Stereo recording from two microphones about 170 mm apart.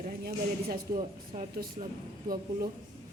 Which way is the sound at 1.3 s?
45° right (ahead or behind).